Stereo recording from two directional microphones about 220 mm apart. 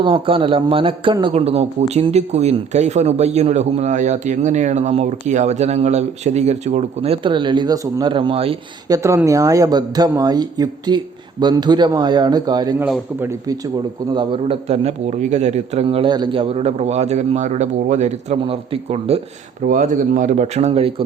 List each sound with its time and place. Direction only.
0.0 s speech: 25° right (ahead or behind)
9.0 s speech: 15° right (ahead or behind)
12.8 s speech: 10° right (ahead or behind)
14.1 s speech: 25° right (ahead or behind)